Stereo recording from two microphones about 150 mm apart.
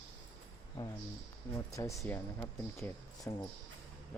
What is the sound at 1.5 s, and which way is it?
Music, 20° left (ahead or behind).